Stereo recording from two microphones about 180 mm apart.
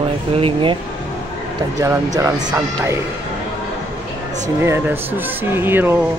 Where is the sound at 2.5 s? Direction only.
15° right (ahead or behind).